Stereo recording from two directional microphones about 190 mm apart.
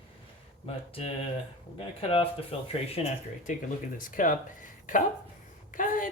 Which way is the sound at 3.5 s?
40° left (ahead or behind).